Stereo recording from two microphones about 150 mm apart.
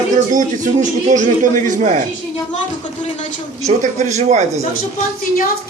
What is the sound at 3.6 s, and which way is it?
Speech, 50° right (ahead or behind).